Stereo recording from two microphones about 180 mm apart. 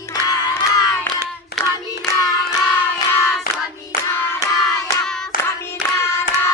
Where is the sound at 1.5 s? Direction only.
60° left (ahead or behind).